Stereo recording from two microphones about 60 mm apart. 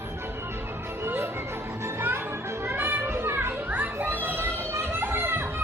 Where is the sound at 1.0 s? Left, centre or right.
Right.